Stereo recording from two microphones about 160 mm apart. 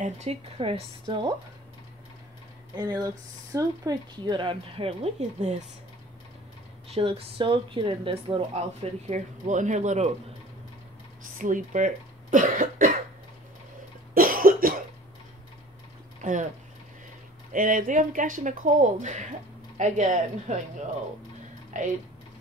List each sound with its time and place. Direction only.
0.0 s speech: 45° right (ahead or behind)
2.7 s speech: 25° right (ahead or behind); by 5.6 s 40° right (ahead or behind)
6.9 s speech: 35° right (ahead or behind)
9.1 s speech: 50° right (ahead or behind)
11.3 s speech: 55° right (ahead or behind)
14.1 s cough: 65° right (ahead or behind)
16.2 s speech: 50° right (ahead or behind)
17.5 s speech: 55° right (ahead or behind)
21.7 s speech: 50° right (ahead or behind)